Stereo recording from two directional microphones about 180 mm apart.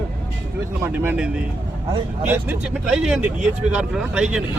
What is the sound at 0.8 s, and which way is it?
Speech, 10° right (ahead or behind).